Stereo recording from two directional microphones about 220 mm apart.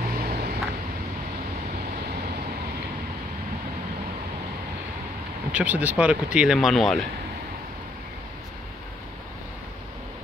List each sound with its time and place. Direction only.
0.0 s vehicle: 40° right (ahead or behind)
5.5 s speech: 5° right (ahead or behind)